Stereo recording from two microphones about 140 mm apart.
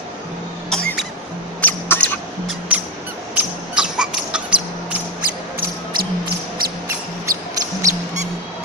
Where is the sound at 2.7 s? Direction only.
10° right (ahead or behind).